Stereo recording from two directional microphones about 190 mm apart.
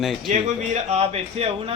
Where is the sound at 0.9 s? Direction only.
35° right (ahead or behind).